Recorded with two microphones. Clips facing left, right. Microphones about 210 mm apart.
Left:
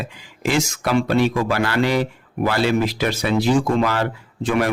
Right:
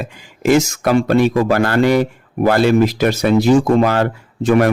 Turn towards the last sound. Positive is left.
turn(degrees=-45)  # may be behind; listen again after turning